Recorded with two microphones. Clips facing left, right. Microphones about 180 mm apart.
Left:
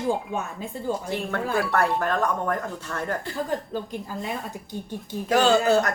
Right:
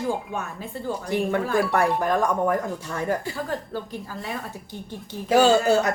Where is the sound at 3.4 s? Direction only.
15° left (ahead or behind).